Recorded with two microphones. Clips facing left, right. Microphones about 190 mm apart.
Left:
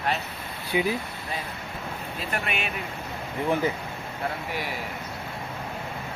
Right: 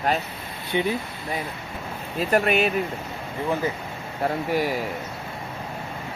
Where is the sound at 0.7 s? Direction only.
5° left (ahead or behind).